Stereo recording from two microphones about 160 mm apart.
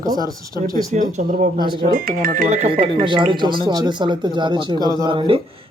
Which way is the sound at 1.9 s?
65° right (ahead or behind).